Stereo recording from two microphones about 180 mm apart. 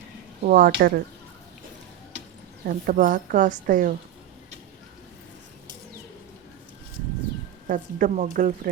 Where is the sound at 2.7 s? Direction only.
50° right (ahead or behind).